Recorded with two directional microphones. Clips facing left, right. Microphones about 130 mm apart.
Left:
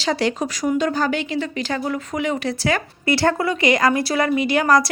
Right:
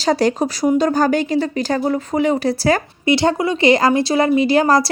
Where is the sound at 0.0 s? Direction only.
40° right (ahead or behind).